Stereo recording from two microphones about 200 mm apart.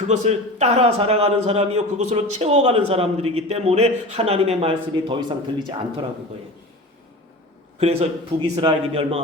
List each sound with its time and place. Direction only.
0.3 s a man's voice: 30° right (ahead or behind)
7.8 s a man's voice: 30° right (ahead or behind)